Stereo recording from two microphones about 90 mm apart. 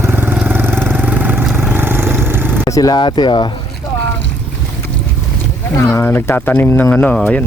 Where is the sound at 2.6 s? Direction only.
45° left (ahead or behind).